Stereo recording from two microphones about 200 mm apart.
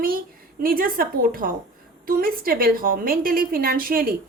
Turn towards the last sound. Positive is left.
turn(degrees=-45)  # may be behind; listen again after turning